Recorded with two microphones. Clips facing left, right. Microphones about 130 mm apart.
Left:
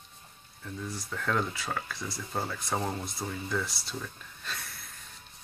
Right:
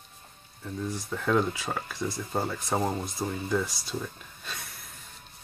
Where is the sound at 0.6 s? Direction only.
15° right (ahead or behind).